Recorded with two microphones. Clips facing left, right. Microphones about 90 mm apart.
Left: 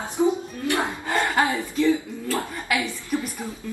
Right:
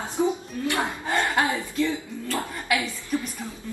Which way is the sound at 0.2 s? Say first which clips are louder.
Left 3 dB; 20° right (ahead or behind).